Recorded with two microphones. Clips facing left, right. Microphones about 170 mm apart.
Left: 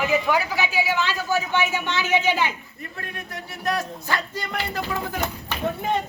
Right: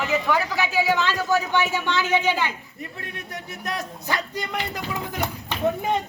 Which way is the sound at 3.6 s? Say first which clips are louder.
Left 5 dB; 20° right (ahead or behind).